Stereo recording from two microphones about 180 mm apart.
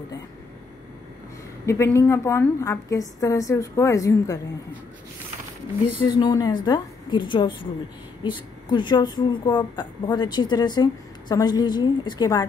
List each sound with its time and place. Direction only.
1.7 s a woman's voice: 15° left (ahead or behind)
6.0 s speech: 25° left (ahead or behind)